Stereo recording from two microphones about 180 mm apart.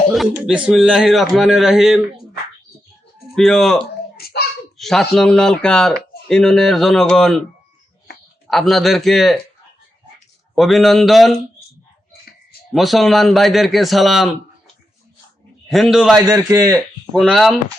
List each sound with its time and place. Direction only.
0.1 s speech: centre (ahead or behind)
3.3 s speech: 5° left (ahead or behind)
4.2 s a sound: 60° left (ahead or behind)
4.8 s speech: centre (ahead or behind)
8.4 s speech: centre (ahead or behind)
10.5 s speech: centre (ahead or behind)
12.7 s speech: centre (ahead or behind)
15.7 s speech: centre (ahead or behind)
16.1 s a man's voice: 20° right (ahead or behind)
16.7 s speech: centre (ahead or behind)